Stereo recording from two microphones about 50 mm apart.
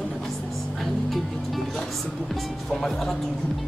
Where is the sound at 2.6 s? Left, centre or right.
Centre.